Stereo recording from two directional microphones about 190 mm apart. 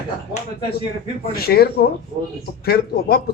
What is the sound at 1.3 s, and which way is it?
Speech, 55° left (ahead or behind).